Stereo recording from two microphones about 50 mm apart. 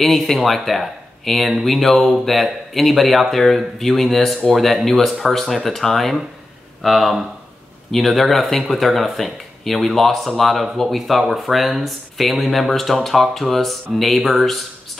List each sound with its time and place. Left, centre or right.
0.0 s speech: centre